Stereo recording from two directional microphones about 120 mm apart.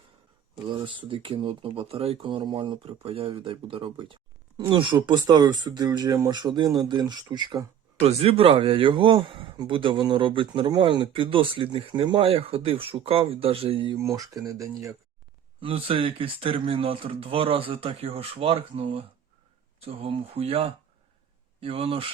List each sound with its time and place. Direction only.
0.7 s speech: 45° right (ahead or behind)
8.0 s speech: 55° right (ahead or behind)
14.0 s speech: 30° right (ahead or behind)
15.6 s speech: 50° right (ahead or behind)